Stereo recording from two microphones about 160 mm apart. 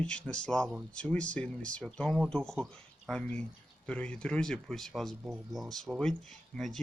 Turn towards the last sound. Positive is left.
turn(degrees=5)  # may be behind; listen again after turning